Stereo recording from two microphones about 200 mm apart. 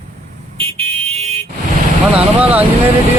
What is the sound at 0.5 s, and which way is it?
Vehicle, 30° right (ahead or behind).